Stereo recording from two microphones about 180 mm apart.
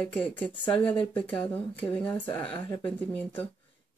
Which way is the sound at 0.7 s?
25° left (ahead or behind).